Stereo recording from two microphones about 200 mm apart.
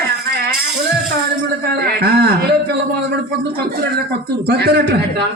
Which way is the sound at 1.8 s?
55° right (ahead or behind).